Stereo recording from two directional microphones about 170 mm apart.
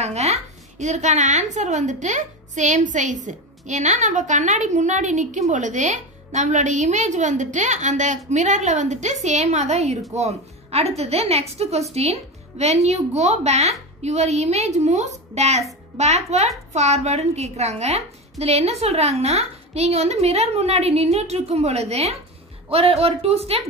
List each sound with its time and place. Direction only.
0.0 s a woman's voice: 40° right (ahead or behind)